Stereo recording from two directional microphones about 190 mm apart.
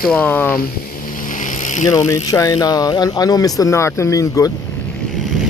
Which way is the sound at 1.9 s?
15° left (ahead or behind).